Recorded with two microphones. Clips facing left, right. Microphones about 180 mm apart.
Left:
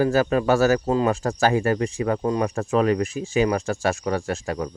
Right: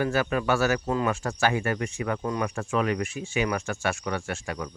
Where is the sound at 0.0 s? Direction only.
35° left (ahead or behind).